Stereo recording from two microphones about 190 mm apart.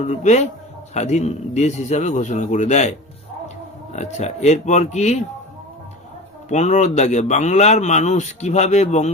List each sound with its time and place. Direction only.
0.0 s speech: 35° left (ahead or behind)
3.9 s speech: 35° left (ahead or behind)
6.5 s speech: 40° left (ahead or behind)